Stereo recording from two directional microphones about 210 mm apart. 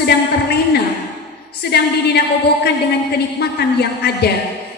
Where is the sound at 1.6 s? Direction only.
50° left (ahead or behind).